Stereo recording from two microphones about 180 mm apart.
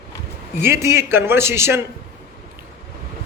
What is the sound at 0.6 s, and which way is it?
A man's voice, 15° right (ahead or behind).